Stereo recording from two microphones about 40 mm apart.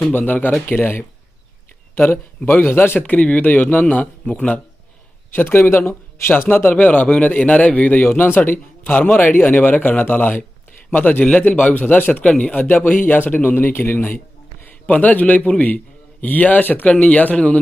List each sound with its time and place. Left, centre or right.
0.1 s a man's voice: left
0.8 s speech: left
2.4 s speech: left
3.0 s a man's voice: left
5.3 s a man's voice: left
6.5 s a man's voice: left
12.2 s a man's voice: left
14.6 s a man's voice: left